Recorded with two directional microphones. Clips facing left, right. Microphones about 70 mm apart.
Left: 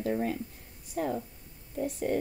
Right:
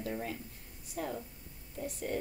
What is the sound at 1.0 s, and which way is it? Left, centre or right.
Speech, left.